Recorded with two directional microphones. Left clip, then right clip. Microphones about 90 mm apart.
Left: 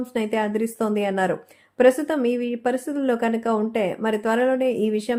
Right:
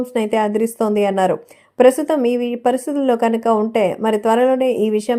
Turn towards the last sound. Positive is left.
turn(degrees=-35)  # may be behind; listen again after turning